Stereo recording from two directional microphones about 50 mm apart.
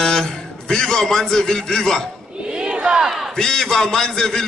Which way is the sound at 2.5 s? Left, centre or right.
Centre.